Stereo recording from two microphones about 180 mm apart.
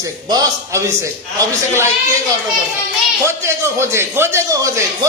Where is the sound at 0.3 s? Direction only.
20° right (ahead or behind).